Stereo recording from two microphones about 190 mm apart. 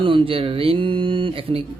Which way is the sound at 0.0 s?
30° right (ahead or behind).